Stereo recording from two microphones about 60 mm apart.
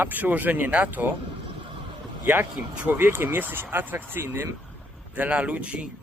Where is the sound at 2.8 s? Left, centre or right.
Right.